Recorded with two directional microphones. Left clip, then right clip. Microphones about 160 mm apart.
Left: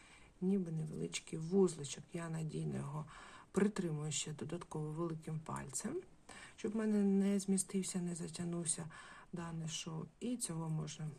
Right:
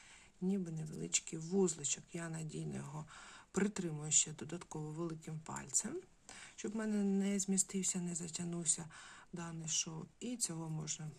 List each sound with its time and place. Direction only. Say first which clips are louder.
0.4 s speech: left 2 dB; 25° right (ahead or behind)